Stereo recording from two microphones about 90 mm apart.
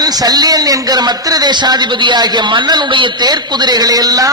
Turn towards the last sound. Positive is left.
turn(degrees=-45)  # may be behind; listen again after turning